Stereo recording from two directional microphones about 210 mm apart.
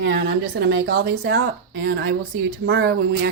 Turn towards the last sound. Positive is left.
turn(degrees=-45)  # may be behind; listen again after turning